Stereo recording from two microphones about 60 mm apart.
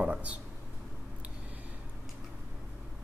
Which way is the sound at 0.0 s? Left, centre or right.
Right.